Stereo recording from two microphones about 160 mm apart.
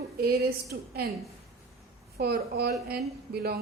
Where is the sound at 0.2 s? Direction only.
75° right (ahead or behind).